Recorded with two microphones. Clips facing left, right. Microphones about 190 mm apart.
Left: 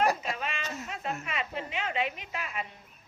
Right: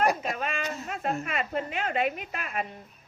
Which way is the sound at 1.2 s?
50° right (ahead or behind).